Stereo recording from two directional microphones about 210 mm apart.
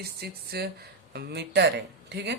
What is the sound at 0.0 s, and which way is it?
Speech, 50° right (ahead or behind).